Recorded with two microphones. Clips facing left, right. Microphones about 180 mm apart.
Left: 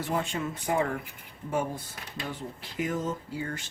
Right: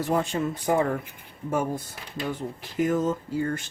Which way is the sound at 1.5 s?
45° right (ahead or behind).